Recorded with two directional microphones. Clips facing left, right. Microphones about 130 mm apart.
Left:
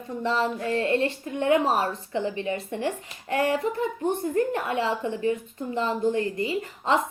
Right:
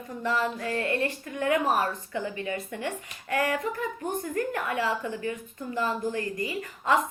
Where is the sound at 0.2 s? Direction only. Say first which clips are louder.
Left 2 dB; 25° left (ahead or behind).